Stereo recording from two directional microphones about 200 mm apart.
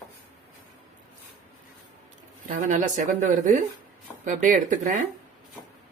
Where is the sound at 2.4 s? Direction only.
40° right (ahead or behind).